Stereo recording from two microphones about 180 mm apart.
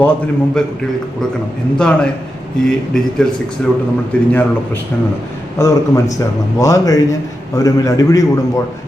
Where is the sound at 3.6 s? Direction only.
5° left (ahead or behind).